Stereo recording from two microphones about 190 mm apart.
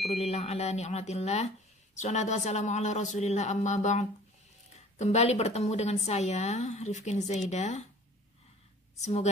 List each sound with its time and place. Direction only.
0.1 s a woman's voice: 35° left (ahead or behind)
8.9 s a woman's voice: 35° left (ahead or behind)